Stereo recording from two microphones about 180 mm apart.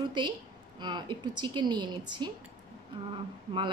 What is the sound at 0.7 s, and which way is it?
Speech, 25° right (ahead or behind).